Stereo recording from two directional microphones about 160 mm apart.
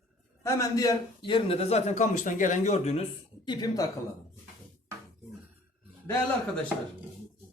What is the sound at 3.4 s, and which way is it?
Speech, 20° left (ahead or behind).